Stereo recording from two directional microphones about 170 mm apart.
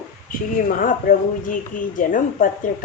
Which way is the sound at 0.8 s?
55° left (ahead or behind).